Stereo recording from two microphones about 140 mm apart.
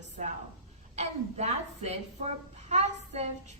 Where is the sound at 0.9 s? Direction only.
50° right (ahead or behind).